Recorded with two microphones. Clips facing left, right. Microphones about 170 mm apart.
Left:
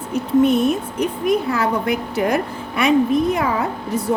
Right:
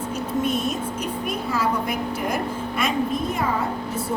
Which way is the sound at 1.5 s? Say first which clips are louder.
Left 4 dB; 65° left (ahead or behind).